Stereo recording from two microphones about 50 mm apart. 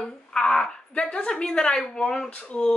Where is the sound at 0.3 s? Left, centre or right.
Centre.